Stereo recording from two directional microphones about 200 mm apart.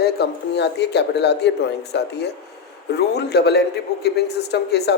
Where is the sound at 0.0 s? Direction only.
55° left (ahead or behind).